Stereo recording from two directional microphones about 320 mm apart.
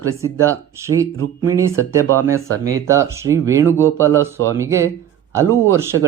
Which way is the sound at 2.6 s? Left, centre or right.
Centre.